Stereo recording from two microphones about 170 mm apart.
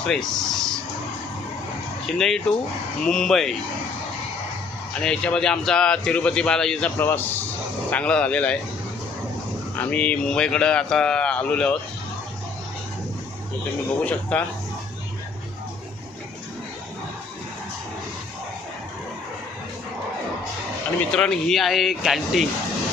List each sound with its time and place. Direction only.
0.1 s speech: centre (ahead or behind)
2.0 s a man's voice: 5° left (ahead or behind)
4.9 s a man's voice: 5° left (ahead or behind)
9.7 s a man's voice: 10° left (ahead or behind)
14.0 s speech: 10° left (ahead or behind)
21.0 s a man's voice: 5° left (ahead or behind)